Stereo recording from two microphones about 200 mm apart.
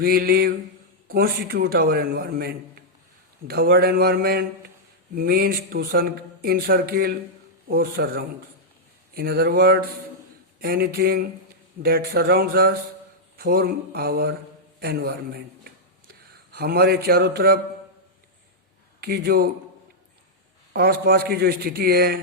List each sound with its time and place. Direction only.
0.0 s speech: 50° right (ahead or behind)
15.6 s a sound: 50° right (ahead or behind)
18.9 s speech: 50° right (ahead or behind)
20.7 s speech: 50° right (ahead or behind)